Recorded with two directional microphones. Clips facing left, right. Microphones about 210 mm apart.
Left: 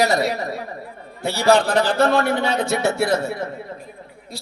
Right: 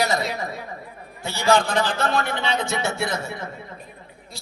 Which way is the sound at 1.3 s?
60° left (ahead or behind).